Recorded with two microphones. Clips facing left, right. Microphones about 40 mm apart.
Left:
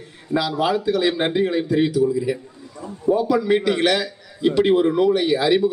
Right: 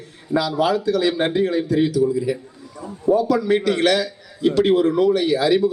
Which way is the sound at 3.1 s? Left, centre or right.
Centre.